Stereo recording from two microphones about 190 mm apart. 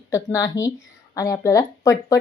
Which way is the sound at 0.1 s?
15° left (ahead or behind).